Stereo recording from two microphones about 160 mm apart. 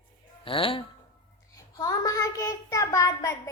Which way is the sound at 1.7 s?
20° left (ahead or behind).